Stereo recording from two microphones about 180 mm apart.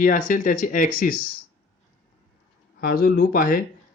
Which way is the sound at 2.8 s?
55° left (ahead or behind).